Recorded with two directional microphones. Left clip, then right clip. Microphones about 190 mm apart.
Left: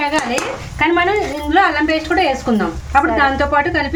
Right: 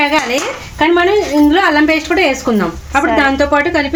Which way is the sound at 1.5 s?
45° right (ahead or behind).